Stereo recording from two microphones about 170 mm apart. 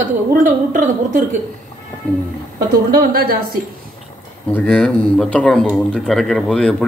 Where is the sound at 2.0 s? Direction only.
10° left (ahead or behind).